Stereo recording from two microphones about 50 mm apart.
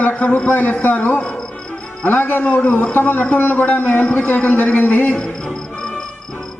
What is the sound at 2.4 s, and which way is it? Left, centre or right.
A man's voice, left.